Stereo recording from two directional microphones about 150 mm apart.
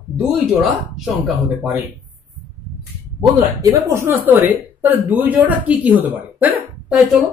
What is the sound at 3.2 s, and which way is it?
A woman's voice, 20° right (ahead or behind).